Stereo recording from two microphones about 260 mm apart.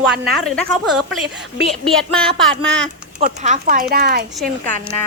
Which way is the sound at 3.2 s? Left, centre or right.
Right.